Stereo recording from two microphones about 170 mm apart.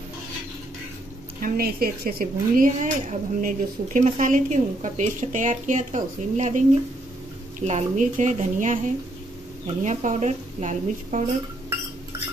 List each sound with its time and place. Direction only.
1.4 s speech: 60° right (ahead or behind); by 6.6 s 45° right (ahead or behind)
7.6 s speech: 45° right (ahead or behind)